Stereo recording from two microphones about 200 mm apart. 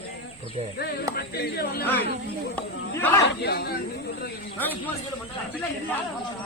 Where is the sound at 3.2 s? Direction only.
55° left (ahead or behind).